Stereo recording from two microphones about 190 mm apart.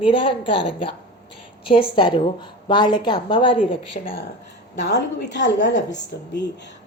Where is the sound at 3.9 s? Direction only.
40° left (ahead or behind).